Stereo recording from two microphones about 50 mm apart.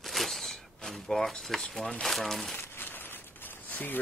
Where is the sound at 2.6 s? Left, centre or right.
Left.